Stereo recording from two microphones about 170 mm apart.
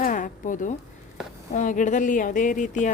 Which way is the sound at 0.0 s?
50° left (ahead or behind).